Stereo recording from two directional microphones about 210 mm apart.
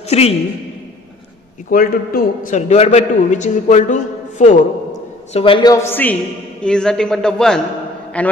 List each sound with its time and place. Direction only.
0.1 s a man's voice: 30° left (ahead or behind)
1.7 s a man's voice: 45° left (ahead or behind)
5.3 s a man's voice: 25° left (ahead or behind); by 8.3 s 5° left (ahead or behind)